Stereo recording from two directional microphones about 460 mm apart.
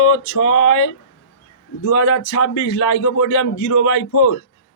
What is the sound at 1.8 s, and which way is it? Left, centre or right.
A man's voice, left.